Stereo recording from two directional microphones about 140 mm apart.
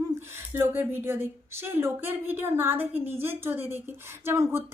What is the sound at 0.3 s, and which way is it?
Speech, 15° right (ahead or behind).